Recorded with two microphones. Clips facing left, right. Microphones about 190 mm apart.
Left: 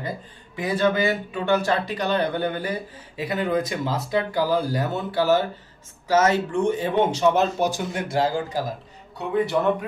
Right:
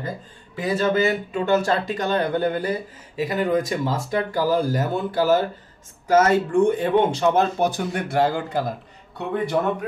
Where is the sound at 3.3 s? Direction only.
45° right (ahead or behind); by 8.6 s 60° right (ahead or behind).